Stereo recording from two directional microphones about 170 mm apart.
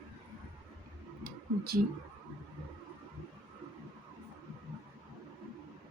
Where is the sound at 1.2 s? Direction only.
65° right (ahead or behind).